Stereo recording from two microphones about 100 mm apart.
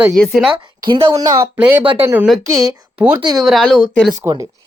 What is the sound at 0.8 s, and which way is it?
Speech, 60° right (ahead or behind).